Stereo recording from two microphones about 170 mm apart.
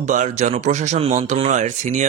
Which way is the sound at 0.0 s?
45° right (ahead or behind).